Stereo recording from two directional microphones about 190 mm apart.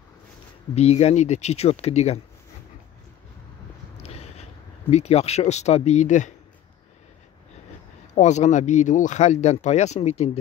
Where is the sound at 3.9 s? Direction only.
35° left (ahead or behind).